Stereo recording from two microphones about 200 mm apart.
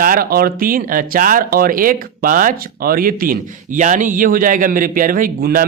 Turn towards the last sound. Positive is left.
turn(degrees=-45)  # may be behind; listen again after turning